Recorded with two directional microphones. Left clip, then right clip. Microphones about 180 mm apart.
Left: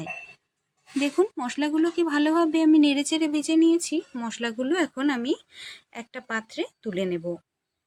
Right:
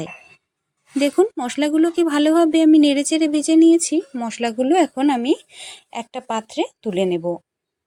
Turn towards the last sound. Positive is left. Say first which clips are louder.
# right 8 dB
turn(degrees=-25)  # may be behind; listen again after turning